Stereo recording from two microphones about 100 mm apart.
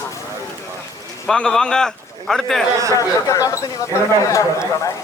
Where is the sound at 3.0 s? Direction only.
35° left (ahead or behind).